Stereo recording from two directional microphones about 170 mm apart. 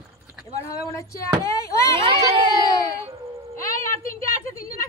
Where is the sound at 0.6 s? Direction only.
20° left (ahead or behind).